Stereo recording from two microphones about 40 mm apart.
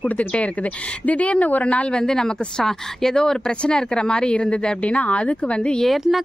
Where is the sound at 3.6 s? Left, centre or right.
Left.